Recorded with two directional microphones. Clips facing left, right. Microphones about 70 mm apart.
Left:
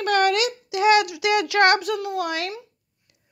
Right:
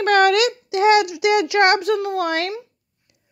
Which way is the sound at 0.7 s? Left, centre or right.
Right.